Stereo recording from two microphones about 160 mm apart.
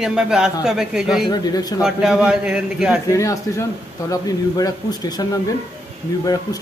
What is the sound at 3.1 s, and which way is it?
Speech, 20° left (ahead or behind).